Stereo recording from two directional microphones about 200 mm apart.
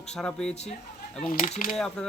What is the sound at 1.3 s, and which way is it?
Speech, 45° left (ahead or behind).